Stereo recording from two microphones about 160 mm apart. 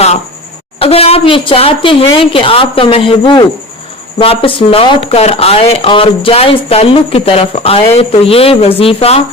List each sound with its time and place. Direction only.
0.8 s speech: 40° left (ahead or behind)